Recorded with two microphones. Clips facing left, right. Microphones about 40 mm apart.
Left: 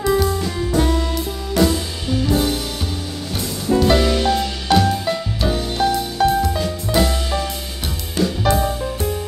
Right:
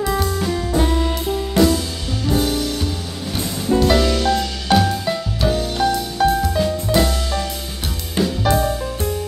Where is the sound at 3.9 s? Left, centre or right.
Centre.